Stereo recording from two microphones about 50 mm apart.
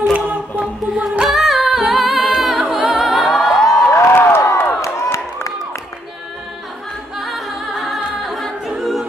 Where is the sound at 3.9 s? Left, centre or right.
Left.